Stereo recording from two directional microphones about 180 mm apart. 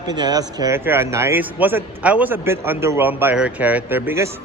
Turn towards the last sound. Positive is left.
turn(degrees=-15)  # may be behind; listen again after turning